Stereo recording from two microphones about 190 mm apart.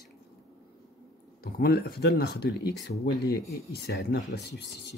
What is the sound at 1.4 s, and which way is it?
Speech, 55° left (ahead or behind).